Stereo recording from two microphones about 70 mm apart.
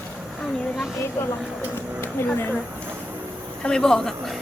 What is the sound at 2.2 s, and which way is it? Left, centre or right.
Speech, left.